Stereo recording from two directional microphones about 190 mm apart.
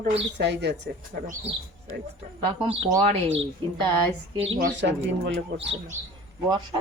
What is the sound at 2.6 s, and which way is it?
Speech, 30° right (ahead or behind).